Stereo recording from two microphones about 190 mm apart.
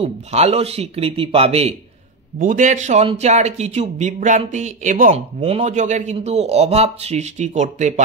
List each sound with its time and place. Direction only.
0.0 s a man's voice: 35° right (ahead or behind)
2.3 s a man's voice: 45° right (ahead or behind)